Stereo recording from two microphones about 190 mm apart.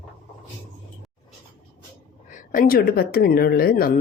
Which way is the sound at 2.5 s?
50° left (ahead or behind).